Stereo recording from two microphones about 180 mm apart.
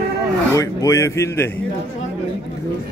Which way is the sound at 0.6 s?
20° left (ahead or behind).